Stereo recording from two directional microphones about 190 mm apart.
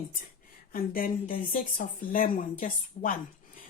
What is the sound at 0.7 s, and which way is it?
Speech, 50° left (ahead or behind).